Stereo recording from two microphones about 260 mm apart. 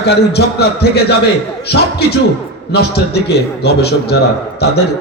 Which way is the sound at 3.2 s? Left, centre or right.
Left.